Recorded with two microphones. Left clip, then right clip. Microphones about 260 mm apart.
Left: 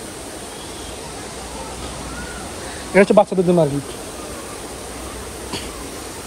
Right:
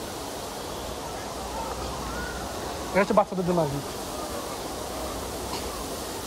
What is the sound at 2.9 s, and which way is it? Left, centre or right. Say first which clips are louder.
Speech: left 9 dB; left.